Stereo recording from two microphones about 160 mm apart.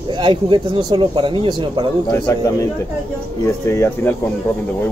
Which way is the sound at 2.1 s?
20° left (ahead or behind).